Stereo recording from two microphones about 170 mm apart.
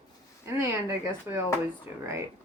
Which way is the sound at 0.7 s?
15° right (ahead or behind).